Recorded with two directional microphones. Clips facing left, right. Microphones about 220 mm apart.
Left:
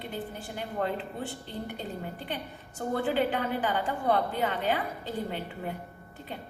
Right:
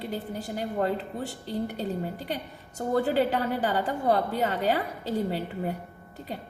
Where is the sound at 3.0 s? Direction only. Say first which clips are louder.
Right 3 dB; 40° right (ahead or behind).